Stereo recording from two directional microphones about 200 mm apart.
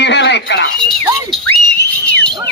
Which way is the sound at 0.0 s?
60° left (ahead or behind).